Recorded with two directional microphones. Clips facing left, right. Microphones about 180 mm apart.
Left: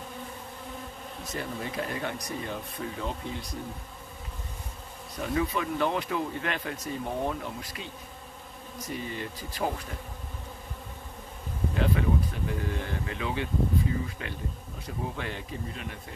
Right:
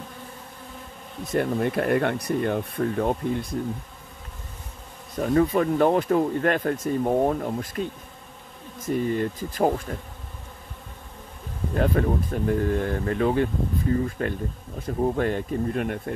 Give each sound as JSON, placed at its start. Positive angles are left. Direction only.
{"t": 1.3, "sound": "speech", "side_deg": -60}
{"t": 5.1, "sound": "speech", "side_deg": -45}
{"t": 11.7, "sound": "speech", "side_deg": -45}